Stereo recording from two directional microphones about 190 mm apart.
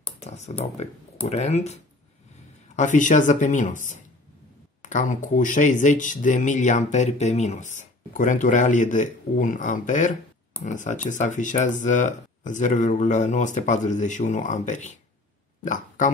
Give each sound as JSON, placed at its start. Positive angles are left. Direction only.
{"t": 0.2, "sound": "speech", "side_deg": 35}